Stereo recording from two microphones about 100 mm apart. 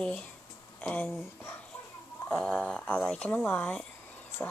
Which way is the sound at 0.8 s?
15° left (ahead or behind).